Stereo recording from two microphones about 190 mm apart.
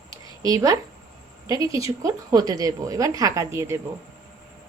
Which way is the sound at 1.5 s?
15° right (ahead or behind).